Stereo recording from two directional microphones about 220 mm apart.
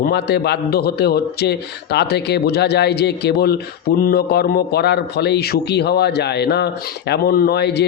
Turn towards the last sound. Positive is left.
turn(degrees=50)  # may be behind; listen again after turning